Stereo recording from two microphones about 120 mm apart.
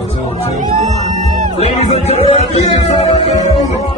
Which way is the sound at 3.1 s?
70° left (ahead or behind).